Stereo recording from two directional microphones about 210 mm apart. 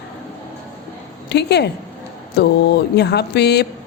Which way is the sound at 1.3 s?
55° left (ahead or behind).